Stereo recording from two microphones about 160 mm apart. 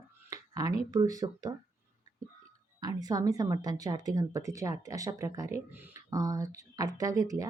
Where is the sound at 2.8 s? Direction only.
25° right (ahead or behind).